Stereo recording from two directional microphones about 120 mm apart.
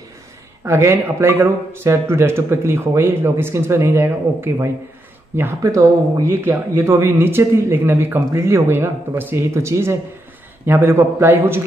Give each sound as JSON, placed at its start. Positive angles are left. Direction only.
{"t": 0.7, "sound": "speech", "side_deg": -20}